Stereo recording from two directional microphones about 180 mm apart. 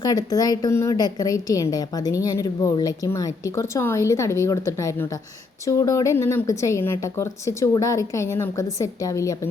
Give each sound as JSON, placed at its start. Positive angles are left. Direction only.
{"t": 0.0, "sound": "a woman's voice", "side_deg": 20}